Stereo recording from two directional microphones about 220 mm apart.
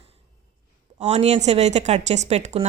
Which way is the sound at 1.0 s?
30° right (ahead or behind).